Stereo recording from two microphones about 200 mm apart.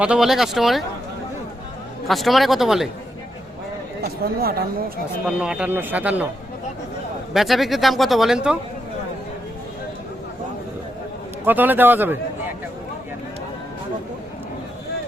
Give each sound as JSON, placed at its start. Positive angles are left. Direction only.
{"t": 0.0, "sound": "speech", "side_deg": -5}
{"t": 2.0, "sound": "speech", "side_deg": 0}
{"t": 4.2, "sound": "speech", "side_deg": -50}
{"t": 5.2, "sound": "speech", "side_deg": -5}
{"t": 7.3, "sound": "speech", "side_deg": 0}
{"t": 11.4, "sound": "speech", "side_deg": -10}